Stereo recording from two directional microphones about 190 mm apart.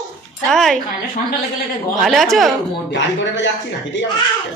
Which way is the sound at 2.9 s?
70° left (ahead or behind).